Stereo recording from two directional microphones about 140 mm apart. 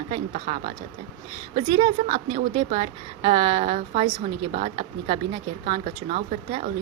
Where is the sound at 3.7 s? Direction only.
60° right (ahead or behind).